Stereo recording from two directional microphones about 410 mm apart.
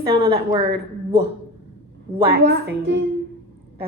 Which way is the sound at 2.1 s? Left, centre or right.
Right.